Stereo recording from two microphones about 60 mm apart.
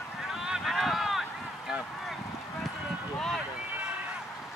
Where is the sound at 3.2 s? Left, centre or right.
Centre.